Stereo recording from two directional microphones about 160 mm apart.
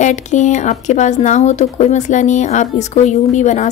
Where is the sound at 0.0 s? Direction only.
50° left (ahead or behind).